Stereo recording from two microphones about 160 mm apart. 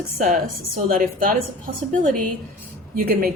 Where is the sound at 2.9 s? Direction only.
65° right (ahead or behind).